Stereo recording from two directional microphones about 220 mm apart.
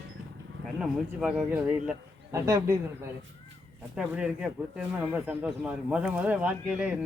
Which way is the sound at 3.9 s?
5° right (ahead or behind).